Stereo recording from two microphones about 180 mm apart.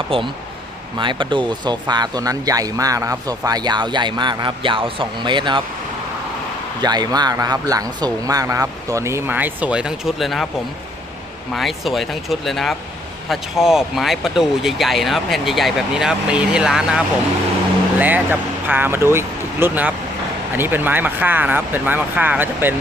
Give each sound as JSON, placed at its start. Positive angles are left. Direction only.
{"t": 0.1, "sound": "speech", "side_deg": -30}
{"t": 6.8, "sound": "speech", "side_deg": -20}
{"t": 11.5, "sound": "speech", "side_deg": 0}
{"t": 18.0, "sound": "speech", "side_deg": -10}